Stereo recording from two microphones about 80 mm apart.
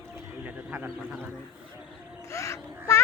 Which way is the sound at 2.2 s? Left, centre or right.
Left.